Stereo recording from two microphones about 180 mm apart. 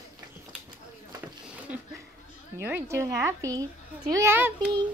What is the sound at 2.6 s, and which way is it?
A woman's voice, 15° right (ahead or behind).